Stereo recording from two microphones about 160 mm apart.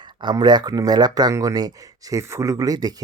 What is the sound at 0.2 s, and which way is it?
Speech, 25° right (ahead or behind).